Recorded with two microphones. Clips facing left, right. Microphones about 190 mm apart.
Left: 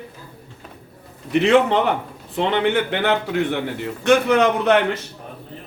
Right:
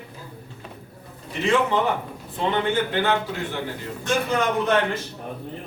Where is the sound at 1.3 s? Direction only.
70° left (ahead or behind).